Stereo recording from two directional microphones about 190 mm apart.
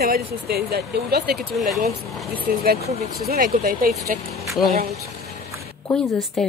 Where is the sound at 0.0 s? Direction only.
55° right (ahead or behind).